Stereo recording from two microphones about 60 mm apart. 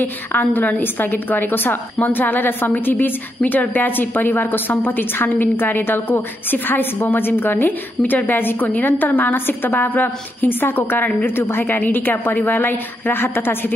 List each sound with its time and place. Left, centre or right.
0.0 s a woman's voice: left